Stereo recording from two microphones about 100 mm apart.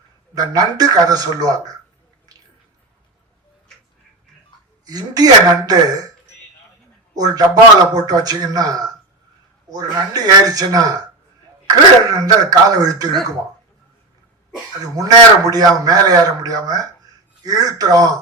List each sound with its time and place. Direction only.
0.3 s a man's voice: 40° right (ahead or behind)
4.9 s a man's voice: 40° right (ahead or behind)
7.2 s a man's voice: 40° right (ahead or behind)
12.0 s a man's voice: 40° right (ahead or behind)
14.9 s a man's voice: 40° right (ahead or behind)